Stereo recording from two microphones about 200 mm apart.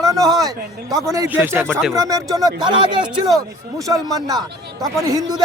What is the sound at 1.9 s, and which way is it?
Speech, 15° right (ahead or behind).